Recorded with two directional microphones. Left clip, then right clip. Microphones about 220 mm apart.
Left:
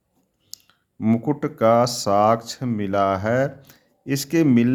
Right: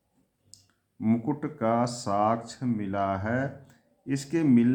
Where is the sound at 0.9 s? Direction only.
45° left (ahead or behind).